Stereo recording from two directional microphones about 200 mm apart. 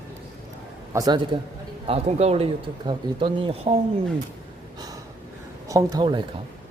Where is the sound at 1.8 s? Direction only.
30° right (ahead or behind).